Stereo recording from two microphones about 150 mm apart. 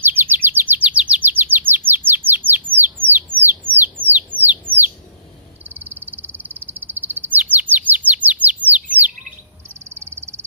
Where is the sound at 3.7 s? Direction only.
15° right (ahead or behind).